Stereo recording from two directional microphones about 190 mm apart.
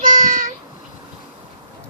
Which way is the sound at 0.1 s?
45° right (ahead or behind).